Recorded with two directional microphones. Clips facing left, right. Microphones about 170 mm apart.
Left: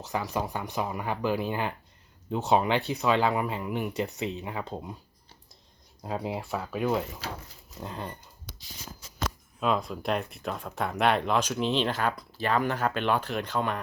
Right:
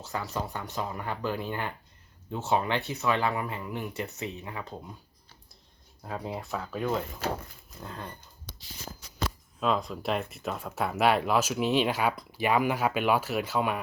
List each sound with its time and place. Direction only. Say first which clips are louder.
0.0 s speech: left 3 dB; 15° left (ahead or behind)
6.0 s speech: left 3 dB; 15° left (ahead or behind)
7.8 s speech: left 3 dB; 15° left (ahead or behind)
9.6 s speech: even; centre (ahead or behind)